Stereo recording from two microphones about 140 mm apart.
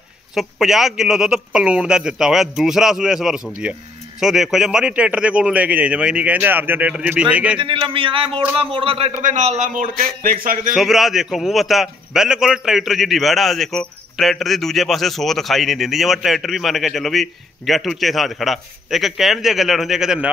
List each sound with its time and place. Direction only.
0.3 s a man's voice: centre (ahead or behind)
7.6 s a man's voice: 40° right (ahead or behind)
9.2 s speech: 55° right (ahead or behind); by 10.7 s 90° right
10.7 s a man's voice: centre (ahead or behind)